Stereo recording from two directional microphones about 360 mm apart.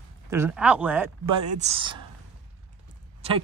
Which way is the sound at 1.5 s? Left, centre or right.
Centre.